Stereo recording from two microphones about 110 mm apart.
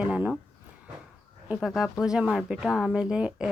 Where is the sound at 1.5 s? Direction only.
Centre (ahead or behind).